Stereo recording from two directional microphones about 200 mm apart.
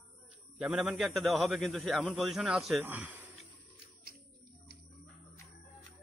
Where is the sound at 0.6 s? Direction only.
5° right (ahead or behind).